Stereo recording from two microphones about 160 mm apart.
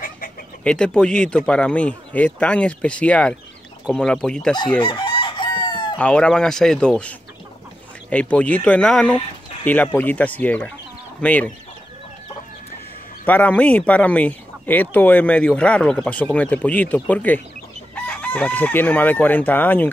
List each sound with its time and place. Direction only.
0.7 s speech: 5° left (ahead or behind)
4.7 s chicken: 30° left (ahead or behind)
5.9 s speech: 5° left (ahead or behind)
13.2 s speech: 10° left (ahead or behind)